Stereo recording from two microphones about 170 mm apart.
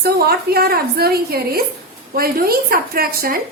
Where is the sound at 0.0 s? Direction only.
65° right (ahead or behind).